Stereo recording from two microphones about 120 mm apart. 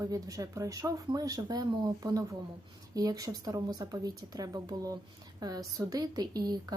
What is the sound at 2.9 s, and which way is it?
A woman's voice, 30° right (ahead or behind).